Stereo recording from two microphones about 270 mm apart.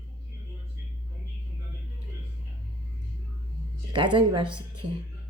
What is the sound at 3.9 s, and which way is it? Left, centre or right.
Speech, centre.